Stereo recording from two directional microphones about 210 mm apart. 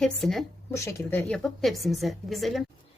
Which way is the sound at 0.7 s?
10° left (ahead or behind).